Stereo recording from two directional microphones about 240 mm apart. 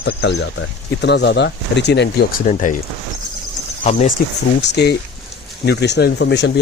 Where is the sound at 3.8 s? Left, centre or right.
Left.